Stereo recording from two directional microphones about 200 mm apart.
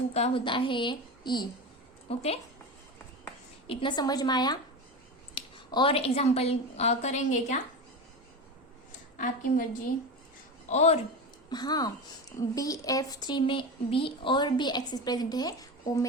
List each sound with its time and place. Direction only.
0.1 s a woman's voice: 30° left (ahead or behind)
3.7 s a woman's voice: 25° left (ahead or behind)
9.1 s a woman's voice: 40° left (ahead or behind)
10.7 s a woman's voice: 35° left (ahead or behind)
11.4 s speech: 20° left (ahead or behind)